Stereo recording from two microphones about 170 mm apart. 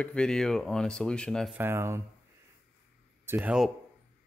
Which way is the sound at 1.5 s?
15° right (ahead or behind).